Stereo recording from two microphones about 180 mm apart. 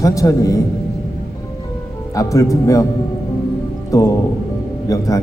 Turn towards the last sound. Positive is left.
turn(degrees=15)  # may be behind; listen again after turning